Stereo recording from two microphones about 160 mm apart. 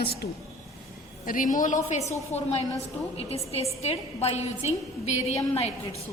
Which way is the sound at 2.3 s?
40° left (ahead or behind).